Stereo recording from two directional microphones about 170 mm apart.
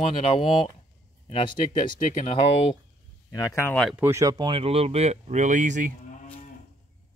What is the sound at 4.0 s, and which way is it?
Speech, 15° right (ahead or behind).